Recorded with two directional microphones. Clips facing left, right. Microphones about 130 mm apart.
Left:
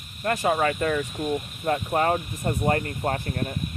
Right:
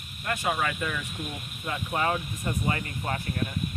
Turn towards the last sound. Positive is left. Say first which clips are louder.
# left 5 dB
turn(degrees=45)  # may be behind; listen again after turning